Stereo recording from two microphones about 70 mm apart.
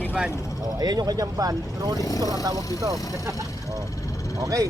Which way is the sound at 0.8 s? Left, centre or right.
Right.